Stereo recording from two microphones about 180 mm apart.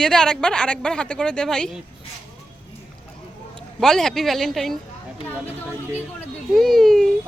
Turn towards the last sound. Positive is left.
turn(degrees=0)  # may be behind; listen again after turning